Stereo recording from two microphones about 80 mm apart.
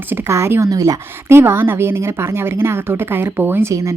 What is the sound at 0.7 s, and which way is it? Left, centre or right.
Speech, right.